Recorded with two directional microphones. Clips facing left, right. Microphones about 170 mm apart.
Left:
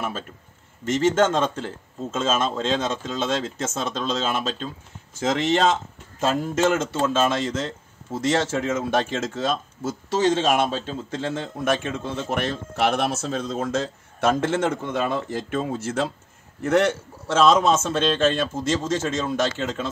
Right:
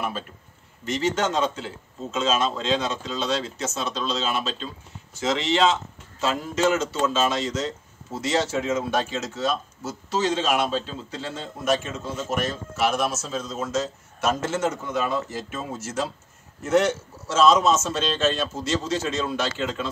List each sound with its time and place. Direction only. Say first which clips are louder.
0.8 s a man's voice: left 5 dB; 50° left (ahead or behind)